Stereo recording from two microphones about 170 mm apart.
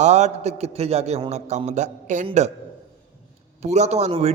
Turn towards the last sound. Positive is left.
turn(degrees=-35)  # may be behind; listen again after turning